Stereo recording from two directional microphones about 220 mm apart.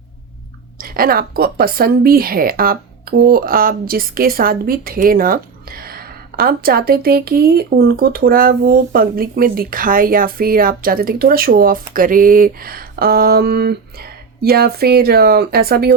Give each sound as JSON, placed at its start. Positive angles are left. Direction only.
{"t": 0.8, "sound": "speech", "side_deg": -40}